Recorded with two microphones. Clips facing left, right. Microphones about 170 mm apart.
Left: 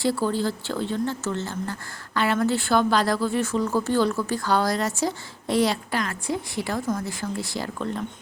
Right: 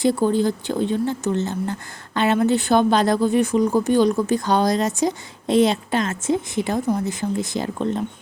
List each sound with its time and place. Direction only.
0.0 s a woman's voice: 20° right (ahead or behind)